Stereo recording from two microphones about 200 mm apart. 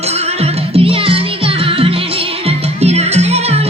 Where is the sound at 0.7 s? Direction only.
25° right (ahead or behind).